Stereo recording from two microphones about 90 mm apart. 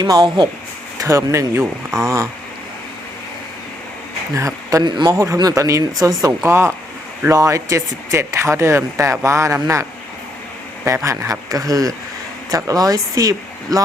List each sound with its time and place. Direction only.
0.0 s speech: 45° right (ahead or behind)
1.0 s speech: 35° right (ahead or behind)
4.4 s speech: 40° right (ahead or behind)
4.8 s a man's voice: 60° right (ahead or behind)
5.0 s speech: 35° right (ahead or behind)
10.9 s speech: 35° right (ahead or behind)